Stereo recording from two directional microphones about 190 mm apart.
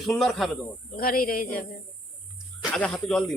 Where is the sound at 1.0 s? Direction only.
50° left (ahead or behind).